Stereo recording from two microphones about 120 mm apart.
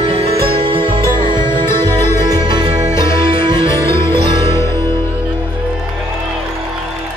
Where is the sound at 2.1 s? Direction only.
35° right (ahead or behind).